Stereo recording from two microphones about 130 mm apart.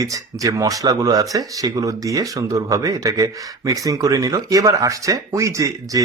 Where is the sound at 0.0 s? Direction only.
25° right (ahead or behind).